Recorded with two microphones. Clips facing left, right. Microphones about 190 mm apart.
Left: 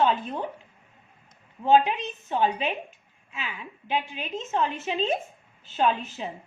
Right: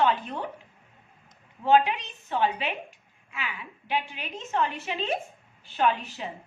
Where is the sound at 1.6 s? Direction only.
20° left (ahead or behind).